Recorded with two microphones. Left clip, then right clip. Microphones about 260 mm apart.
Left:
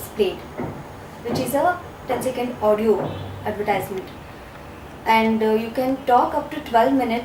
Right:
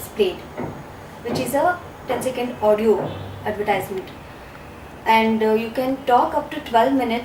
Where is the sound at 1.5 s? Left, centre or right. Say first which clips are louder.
Right 1 dB; centre.